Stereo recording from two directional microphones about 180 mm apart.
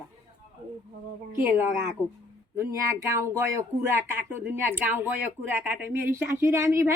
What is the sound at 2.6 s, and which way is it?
A woman's voice, 15° right (ahead or behind).